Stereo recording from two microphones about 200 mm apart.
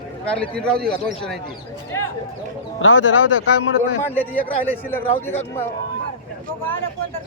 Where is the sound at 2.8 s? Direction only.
75° left (ahead or behind).